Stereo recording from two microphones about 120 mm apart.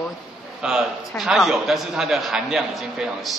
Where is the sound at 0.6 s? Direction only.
5° right (ahead or behind).